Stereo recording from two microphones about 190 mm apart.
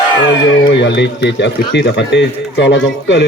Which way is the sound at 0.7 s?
65° left (ahead or behind).